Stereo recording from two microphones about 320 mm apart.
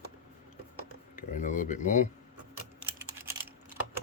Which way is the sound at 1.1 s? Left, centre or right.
Left.